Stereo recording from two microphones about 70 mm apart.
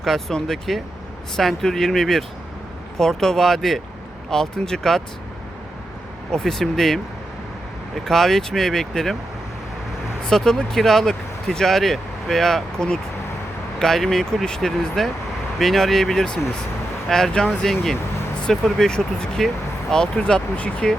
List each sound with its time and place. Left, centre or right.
0.0 s speech: centre
6.3 s speech: centre
10.2 s speech: centre